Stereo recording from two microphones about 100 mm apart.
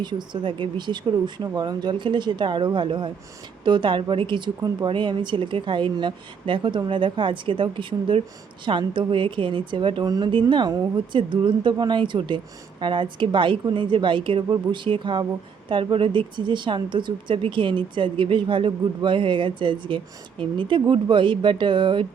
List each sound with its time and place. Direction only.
0.0 s speech: 50° right (ahead or behind)
10.5 s speech: 45° right (ahead or behind)